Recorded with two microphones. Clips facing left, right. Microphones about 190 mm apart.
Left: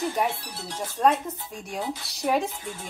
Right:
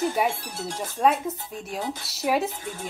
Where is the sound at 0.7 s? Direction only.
10° right (ahead or behind).